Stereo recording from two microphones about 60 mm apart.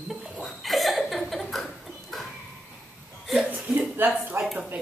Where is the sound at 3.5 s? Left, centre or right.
Right.